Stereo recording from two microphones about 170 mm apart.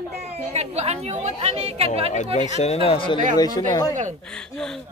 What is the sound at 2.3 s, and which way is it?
Speech, 45° left (ahead or behind).